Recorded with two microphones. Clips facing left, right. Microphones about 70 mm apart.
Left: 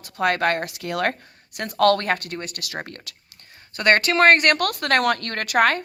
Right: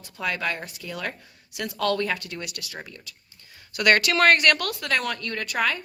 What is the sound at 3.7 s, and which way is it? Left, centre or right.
Speech, left.